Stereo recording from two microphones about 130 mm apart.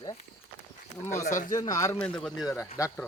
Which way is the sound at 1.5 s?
25° left (ahead or behind).